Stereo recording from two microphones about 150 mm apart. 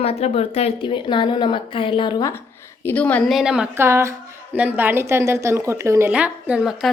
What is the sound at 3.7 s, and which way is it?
A woman's voice, 15° right (ahead or behind).